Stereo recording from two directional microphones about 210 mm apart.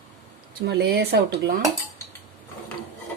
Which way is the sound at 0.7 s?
50° right (ahead or behind).